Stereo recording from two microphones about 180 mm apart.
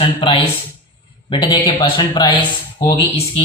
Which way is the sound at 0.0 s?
30° left (ahead or behind).